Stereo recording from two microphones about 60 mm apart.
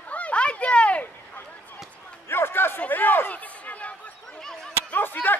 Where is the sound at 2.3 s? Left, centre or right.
Left.